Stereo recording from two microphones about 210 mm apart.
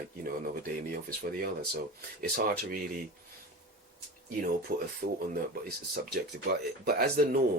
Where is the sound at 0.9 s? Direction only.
45° right (ahead or behind).